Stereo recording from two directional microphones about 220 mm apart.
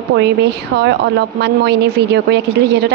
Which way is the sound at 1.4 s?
50° right (ahead or behind).